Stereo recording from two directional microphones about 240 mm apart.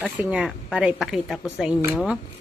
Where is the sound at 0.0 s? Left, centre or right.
Centre.